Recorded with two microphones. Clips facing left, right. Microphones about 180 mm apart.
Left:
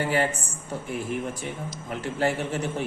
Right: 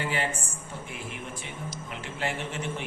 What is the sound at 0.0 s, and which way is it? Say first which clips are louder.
Speech: left 6 dB; 40° left (ahead or behind).